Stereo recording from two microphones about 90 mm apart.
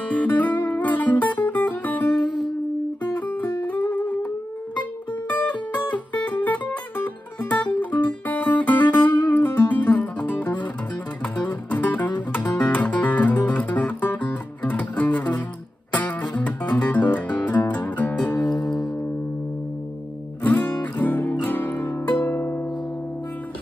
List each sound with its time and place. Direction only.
0.1 s music: 15° left (ahead or behind)
5.3 s music: 20° left (ahead or behind)
8.9 s guitar: 20° left (ahead or behind)
11.4 s music: 20° left (ahead or behind)
18.5 s music: 5° left (ahead or behind)
20.4 s music: 20° left (ahead or behind)
22.2 s harp: 25° left (ahead or behind)